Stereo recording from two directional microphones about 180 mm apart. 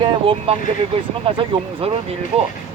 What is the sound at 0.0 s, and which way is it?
Speech, 30° right (ahead or behind).